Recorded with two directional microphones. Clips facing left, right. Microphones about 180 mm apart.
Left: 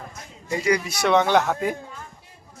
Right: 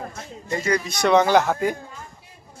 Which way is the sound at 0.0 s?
30° right (ahead or behind).